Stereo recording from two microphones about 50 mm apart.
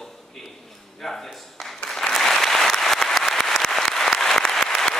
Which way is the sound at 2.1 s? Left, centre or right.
Centre.